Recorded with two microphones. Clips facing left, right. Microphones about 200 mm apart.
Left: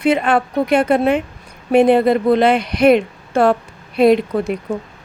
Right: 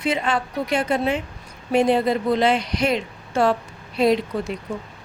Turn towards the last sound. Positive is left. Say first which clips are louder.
# left 6 dB
turn(degrees=60)  # may be behind; listen again after turning